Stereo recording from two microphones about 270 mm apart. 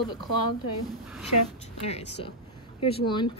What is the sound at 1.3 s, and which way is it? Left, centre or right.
Speech, left.